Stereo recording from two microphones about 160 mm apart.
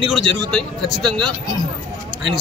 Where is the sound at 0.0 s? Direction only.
Centre (ahead or behind).